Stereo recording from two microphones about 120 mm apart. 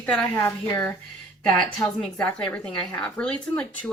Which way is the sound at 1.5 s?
5° left (ahead or behind).